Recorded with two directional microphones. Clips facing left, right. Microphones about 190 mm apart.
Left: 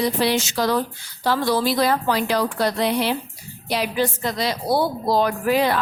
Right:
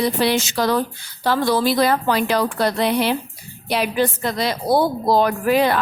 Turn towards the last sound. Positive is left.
turn(degrees=-60)  # may be behind; listen again after turning